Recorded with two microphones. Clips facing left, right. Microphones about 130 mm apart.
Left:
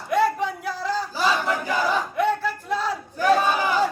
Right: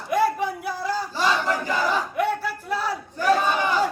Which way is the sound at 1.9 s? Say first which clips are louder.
Left 1 dB; 10° right (ahead or behind).